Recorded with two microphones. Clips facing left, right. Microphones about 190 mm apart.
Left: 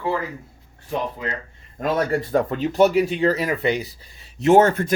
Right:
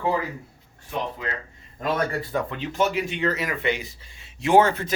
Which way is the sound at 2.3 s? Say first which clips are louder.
Left 7 dB; 45° left (ahead or behind).